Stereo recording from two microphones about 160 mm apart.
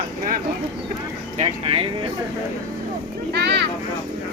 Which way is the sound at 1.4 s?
35° right (ahead or behind).